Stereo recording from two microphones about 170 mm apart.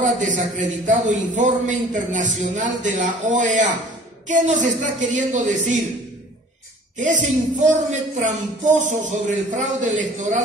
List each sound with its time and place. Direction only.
0.0 s a man's voice: 50° right (ahead or behind)
7.0 s a man's voice: 45° right (ahead or behind)